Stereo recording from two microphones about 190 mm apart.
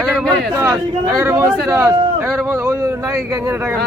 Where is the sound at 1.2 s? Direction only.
15° right (ahead or behind).